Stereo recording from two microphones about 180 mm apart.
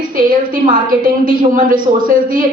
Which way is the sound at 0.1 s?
50° right (ahead or behind).